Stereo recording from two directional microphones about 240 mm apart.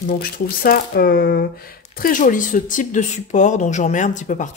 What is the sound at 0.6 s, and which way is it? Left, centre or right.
Speech, left.